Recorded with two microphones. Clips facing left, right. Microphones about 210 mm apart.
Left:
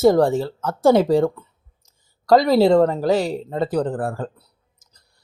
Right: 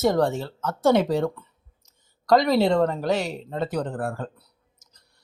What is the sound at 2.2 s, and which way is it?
Speech, 30° left (ahead or behind).